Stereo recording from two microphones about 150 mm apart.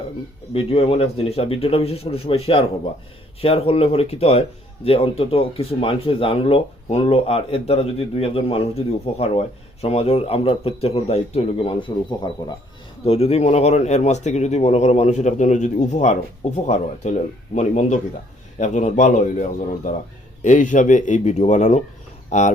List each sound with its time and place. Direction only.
0.5 s speech: 40° left (ahead or behind)
13.1 s speech: 40° left (ahead or behind)